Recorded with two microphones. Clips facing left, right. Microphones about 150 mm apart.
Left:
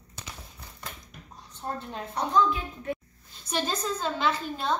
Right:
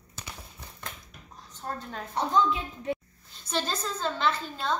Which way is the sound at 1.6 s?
20° left (ahead or behind).